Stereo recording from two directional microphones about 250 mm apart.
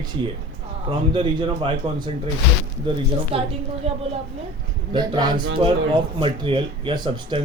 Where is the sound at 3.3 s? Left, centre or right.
Right.